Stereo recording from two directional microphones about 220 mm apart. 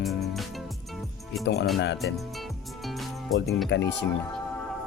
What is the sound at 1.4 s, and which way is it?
Speech, 50° left (ahead or behind).